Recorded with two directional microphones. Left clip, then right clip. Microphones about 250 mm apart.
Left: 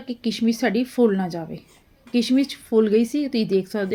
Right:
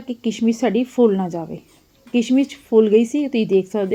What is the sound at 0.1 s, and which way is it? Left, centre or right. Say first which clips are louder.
A woman's voice: right 3 dB; centre.